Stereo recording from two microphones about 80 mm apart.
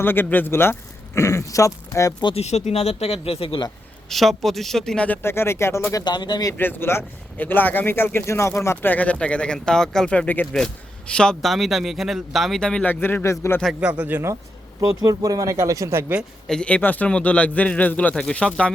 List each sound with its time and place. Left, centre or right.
0.0 s speech: left
4.1 s speech: centre
5.2 s speech: left
6.1 s speech: left
6.6 s a man's voice: left
11.4 s speech: centre
12.6 s speech: centre
12.9 s speech: left
13.7 s a man's voice: centre
14.8 s speech: right
16.5 s speech: centre